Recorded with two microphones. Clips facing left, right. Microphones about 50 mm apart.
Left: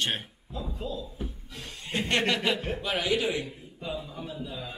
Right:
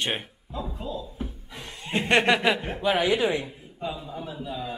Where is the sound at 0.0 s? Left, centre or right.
Right.